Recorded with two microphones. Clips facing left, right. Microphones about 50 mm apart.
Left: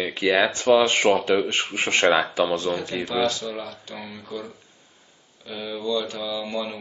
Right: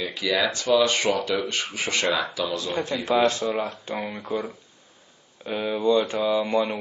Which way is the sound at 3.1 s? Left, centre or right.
Right.